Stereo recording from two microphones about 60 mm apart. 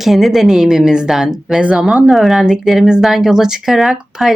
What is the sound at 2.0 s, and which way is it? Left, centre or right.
Speech, centre.